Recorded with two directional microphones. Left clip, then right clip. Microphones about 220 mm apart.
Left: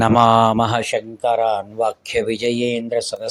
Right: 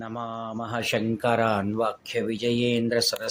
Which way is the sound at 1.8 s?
30° left (ahead or behind).